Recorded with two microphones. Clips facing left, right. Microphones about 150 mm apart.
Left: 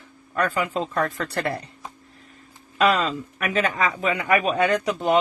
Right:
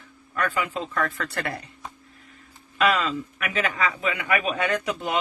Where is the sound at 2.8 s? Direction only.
30° left (ahead or behind).